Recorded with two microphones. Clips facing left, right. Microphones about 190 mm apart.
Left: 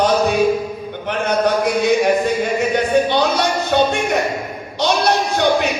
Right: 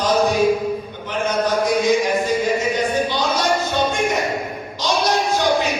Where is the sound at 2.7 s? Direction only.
65° left (ahead or behind).